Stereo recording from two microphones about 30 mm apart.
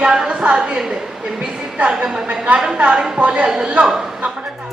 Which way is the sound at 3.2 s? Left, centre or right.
Right.